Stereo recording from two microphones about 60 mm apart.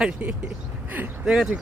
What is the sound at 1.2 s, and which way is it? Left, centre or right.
Speech, centre.